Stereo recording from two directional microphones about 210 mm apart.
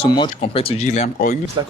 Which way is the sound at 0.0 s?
25° left (ahead or behind).